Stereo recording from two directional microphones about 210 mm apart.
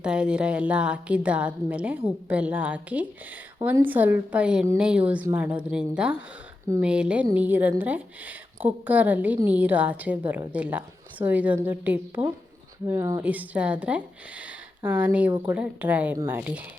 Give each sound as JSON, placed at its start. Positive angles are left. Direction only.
{"t": 0.0, "sound": "a woman's voice", "side_deg": -5}